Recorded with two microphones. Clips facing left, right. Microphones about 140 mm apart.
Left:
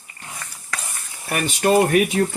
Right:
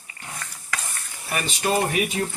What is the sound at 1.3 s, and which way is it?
Speech, 55° left (ahead or behind).